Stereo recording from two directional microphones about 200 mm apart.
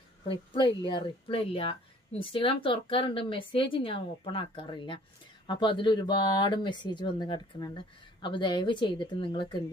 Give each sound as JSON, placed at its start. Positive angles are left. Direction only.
{"t": 0.3, "sound": "speech", "side_deg": 25}